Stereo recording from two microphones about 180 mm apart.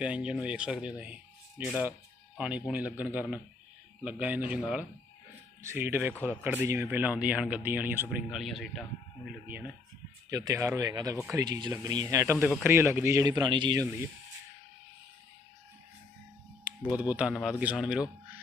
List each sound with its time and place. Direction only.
0.0 s speech: 5° right (ahead or behind)
10.3 s speech: 20° right (ahead or behind)
16.7 s typing: 5° right (ahead or behind)
17.1 s a man's voice: 5° right (ahead or behind)